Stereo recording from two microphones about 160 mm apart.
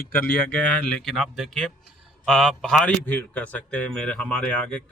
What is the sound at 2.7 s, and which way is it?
Speech, 10° left (ahead or behind).